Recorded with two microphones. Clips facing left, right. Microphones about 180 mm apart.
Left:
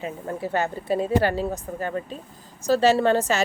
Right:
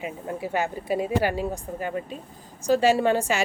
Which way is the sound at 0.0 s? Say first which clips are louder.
Left 1 dB; 10° right (ahead or behind).